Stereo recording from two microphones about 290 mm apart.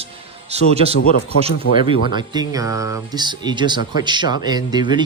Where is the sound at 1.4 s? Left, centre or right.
Centre.